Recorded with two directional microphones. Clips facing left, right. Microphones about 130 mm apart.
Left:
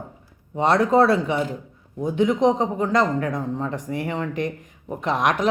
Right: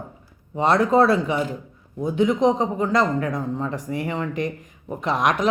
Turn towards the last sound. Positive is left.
turn(degrees=55)  # may be behind; listen again after turning